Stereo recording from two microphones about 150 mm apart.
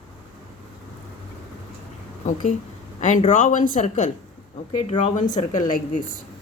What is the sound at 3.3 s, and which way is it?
Speech, 60° left (ahead or behind).